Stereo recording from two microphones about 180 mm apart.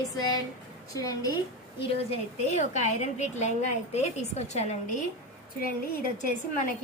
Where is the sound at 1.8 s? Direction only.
35° left (ahead or behind).